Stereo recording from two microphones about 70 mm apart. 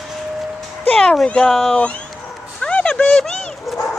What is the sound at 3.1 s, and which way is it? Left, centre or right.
Speech, centre.